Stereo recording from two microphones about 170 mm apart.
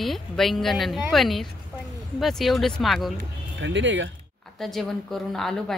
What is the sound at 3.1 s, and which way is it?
Speech, 90° right.